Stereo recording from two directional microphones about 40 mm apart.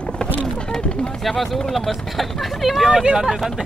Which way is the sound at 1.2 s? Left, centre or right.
Centre.